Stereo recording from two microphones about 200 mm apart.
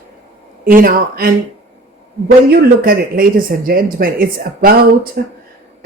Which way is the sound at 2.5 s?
50° right (ahead or behind).